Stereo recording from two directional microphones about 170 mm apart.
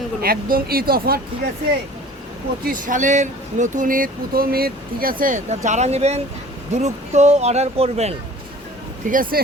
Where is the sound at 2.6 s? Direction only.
50° right (ahead or behind).